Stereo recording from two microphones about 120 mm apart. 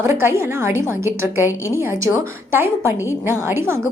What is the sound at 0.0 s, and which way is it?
A woman's voice, 20° right (ahead or behind).